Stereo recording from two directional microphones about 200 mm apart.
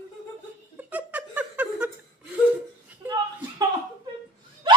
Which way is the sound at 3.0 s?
10° right (ahead or behind).